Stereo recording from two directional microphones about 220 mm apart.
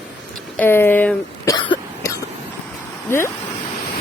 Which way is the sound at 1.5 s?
20° left (ahead or behind).